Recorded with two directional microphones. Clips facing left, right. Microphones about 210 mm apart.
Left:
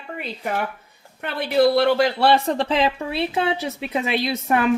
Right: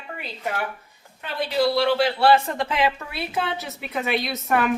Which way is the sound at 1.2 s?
60° left (ahead or behind).